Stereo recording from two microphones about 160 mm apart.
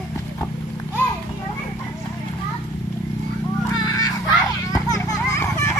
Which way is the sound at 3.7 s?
25° left (ahead or behind).